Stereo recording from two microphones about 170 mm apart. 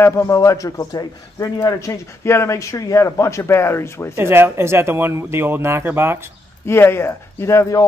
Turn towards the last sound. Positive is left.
turn(degrees=20)  # may be behind; listen again after turning